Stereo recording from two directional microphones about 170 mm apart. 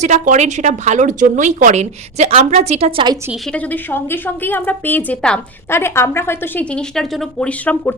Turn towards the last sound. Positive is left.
turn(degrees=10)  # may be behind; listen again after turning